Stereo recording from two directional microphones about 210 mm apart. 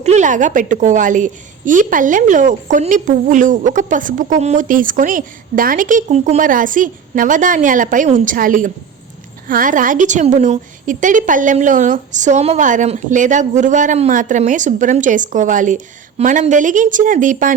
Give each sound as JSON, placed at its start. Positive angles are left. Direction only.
{"t": 0.0, "sound": "a woman's voice", "side_deg": -35}